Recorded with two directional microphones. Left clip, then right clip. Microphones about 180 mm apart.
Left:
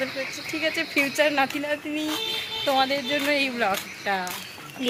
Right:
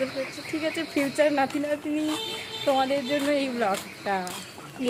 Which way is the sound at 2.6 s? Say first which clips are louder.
Left 1 dB; 10° right (ahead or behind).